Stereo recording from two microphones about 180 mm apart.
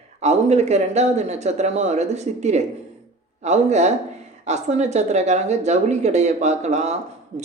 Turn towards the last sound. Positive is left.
turn(degrees=-40)  # may be behind; listen again after turning